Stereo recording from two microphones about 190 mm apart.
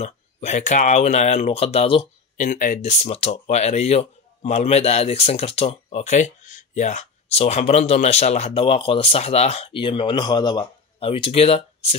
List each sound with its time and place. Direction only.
0.0 s speech: 35° left (ahead or behind)
2.3 s speech: 40° left (ahead or behind)